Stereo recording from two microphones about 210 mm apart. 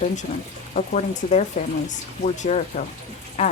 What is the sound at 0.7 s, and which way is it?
Speech, 35° left (ahead or behind).